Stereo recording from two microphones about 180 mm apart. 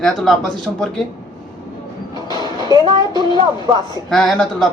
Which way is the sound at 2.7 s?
25° right (ahead or behind).